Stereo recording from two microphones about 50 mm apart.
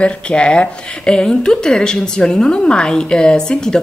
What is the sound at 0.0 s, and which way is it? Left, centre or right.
Speech, centre.